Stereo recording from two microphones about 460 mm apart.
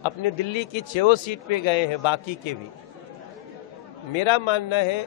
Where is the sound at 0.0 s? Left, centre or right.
Left.